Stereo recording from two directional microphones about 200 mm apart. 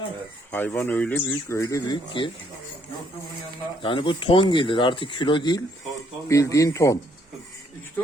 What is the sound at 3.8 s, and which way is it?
Speech, 25° left (ahead or behind).